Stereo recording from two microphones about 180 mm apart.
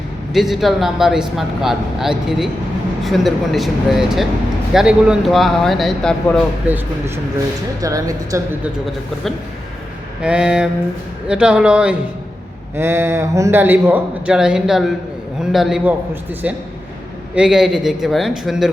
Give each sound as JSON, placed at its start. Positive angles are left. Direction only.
{"t": 0.3, "sound": "speech", "side_deg": 0}
{"t": 6.7, "sound": "a man's voice", "side_deg": -10}
{"t": 10.2, "sound": "a man's voice", "side_deg": -5}
{"t": 17.3, "sound": "speech", "side_deg": -5}